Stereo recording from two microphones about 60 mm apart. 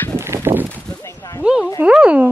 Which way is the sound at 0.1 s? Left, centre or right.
Right.